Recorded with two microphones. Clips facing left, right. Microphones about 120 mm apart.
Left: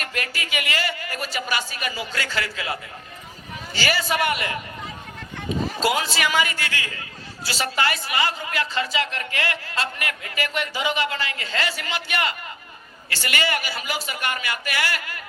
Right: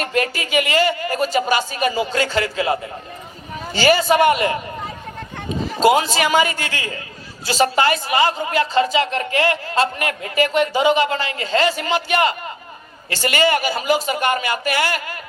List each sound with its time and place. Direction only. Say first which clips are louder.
0.0 s a man's voice: right 9 dB; 30° right (ahead or behind)
5.8 s a man's voice: right 9 dB; 25° right (ahead or behind)